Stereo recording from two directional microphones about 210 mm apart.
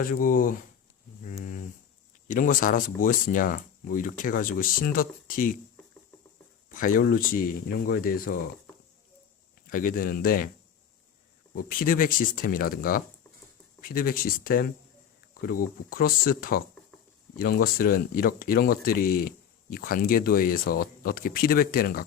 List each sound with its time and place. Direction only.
0.0 s speech: 40° left (ahead or behind)
1.3 s a sound: 40° left (ahead or behind)
2.2 s speech: 40° left (ahead or behind)
6.7 s speech: 40° left (ahead or behind)
9.6 s speech: 40° left (ahead or behind)
11.5 s speech: 40° left (ahead or behind)
15.9 s speech: 45° left (ahead or behind)